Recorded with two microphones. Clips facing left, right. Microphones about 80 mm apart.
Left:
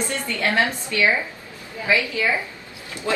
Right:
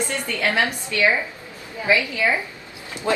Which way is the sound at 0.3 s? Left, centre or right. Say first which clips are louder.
Even; right.